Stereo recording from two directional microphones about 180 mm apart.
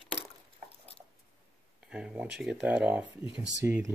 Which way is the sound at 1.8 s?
5° right (ahead or behind).